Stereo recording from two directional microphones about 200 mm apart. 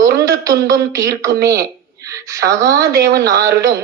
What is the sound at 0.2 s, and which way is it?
A woman's voice, 15° right (ahead or behind).